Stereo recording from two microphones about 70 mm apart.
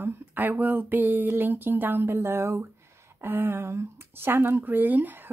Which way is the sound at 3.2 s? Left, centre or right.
Right.